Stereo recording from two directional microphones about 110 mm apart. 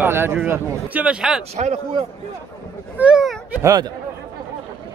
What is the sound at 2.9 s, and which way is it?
Speech, 10° right (ahead or behind).